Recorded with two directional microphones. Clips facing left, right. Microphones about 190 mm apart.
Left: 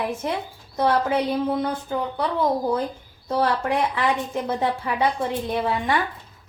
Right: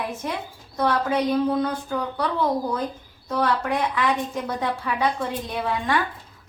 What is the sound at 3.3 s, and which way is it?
A woman's voice, 30° left (ahead or behind).